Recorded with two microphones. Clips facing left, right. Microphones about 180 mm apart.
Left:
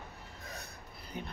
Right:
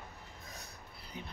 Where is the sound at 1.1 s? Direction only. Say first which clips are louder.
Left 4 dB; 55° left (ahead or behind).